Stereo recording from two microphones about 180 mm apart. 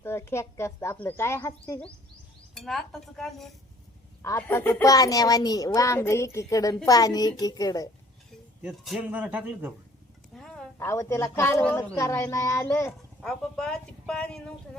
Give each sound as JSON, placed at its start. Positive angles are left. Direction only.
{"t": 0.0, "sound": "a child's voice", "side_deg": 15}
{"t": 2.6, "sound": "speech", "side_deg": 0}
{"t": 4.2, "sound": "a child's voice", "side_deg": 15}
{"t": 8.6, "sound": "a man's voice", "side_deg": 0}
{"t": 10.3, "sound": "a sound", "side_deg": 5}
{"t": 10.8, "sound": "a child's voice", "side_deg": 15}
{"t": 13.2, "sound": "speech", "side_deg": 5}